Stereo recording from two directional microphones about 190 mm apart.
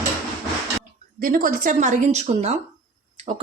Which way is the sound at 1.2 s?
45° right (ahead or behind).